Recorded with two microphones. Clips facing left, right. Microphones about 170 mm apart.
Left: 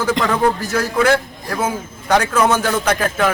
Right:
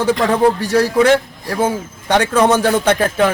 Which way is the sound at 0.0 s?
30° right (ahead or behind).